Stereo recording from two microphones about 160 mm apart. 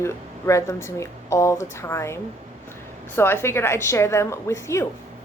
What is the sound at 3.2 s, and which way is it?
Speech, 15° left (ahead or behind).